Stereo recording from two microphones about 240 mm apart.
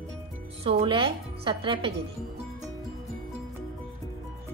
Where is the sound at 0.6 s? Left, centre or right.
Right.